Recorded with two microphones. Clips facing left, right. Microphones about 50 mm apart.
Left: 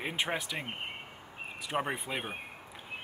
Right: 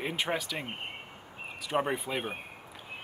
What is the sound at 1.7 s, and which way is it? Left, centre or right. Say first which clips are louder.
Speech: right 3 dB; centre.